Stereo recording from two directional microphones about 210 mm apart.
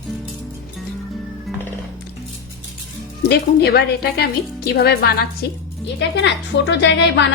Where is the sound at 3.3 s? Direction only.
50° left (ahead or behind).